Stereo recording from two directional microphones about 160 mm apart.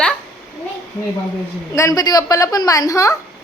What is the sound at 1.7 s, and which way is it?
A woman's voice, 20° left (ahead or behind).